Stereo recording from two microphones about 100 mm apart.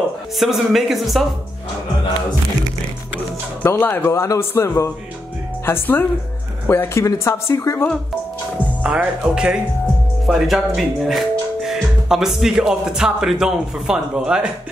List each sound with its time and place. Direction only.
0.4 s speech: centre (ahead or behind)
3.6 s speech: 20° left (ahead or behind)
8.8 s speech: 10° right (ahead or behind)